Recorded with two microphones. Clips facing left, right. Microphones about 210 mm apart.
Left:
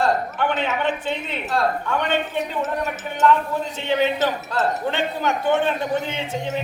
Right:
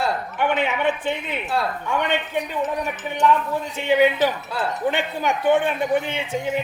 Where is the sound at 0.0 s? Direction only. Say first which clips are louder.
Left 2 dB; 15° right (ahead or behind).